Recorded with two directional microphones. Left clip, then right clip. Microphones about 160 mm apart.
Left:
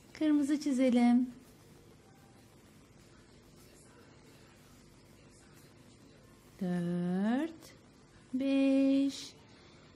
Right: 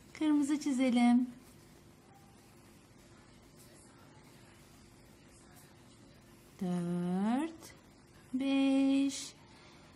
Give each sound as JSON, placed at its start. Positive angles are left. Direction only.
{"t": 0.1, "sound": "a woman's voice", "side_deg": 15}
{"t": 6.6, "sound": "a sound", "side_deg": 10}
{"t": 8.4, "sound": "female singing", "side_deg": 15}